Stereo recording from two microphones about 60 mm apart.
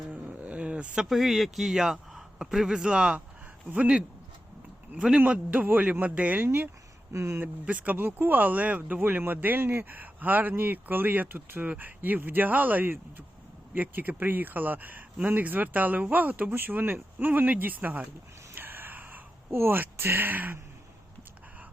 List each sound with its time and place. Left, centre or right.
0.1 s a sound: right
1.1 s a man's voice: centre; by 6.4 s right
6.4 s speech: right
7.1 s speech: right
7.3 s speech: right
18.5 s a sound: right
19.5 s speech: right